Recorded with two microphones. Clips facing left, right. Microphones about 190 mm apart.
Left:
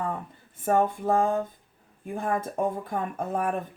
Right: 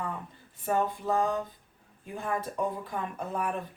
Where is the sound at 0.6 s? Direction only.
50° left (ahead or behind).